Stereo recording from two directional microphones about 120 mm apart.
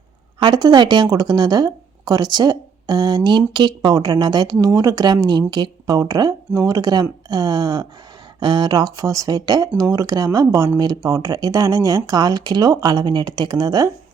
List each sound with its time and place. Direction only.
0.4 s speech: 40° right (ahead or behind)